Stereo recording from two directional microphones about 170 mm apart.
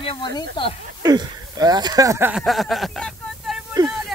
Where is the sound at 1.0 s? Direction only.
20° right (ahead or behind).